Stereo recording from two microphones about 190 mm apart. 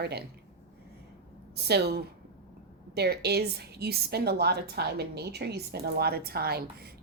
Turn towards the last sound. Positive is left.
turn(degrees=-55)  # may be behind; listen again after turning